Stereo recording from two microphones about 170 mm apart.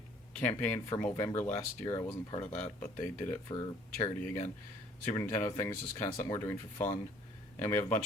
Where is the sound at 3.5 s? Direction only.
30° left (ahead or behind).